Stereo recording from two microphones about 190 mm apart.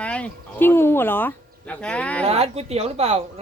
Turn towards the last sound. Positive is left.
turn(degrees=-35)  # may be behind; listen again after turning